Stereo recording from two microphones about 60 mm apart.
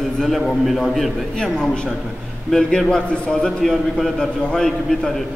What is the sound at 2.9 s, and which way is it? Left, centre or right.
A man's voice, centre.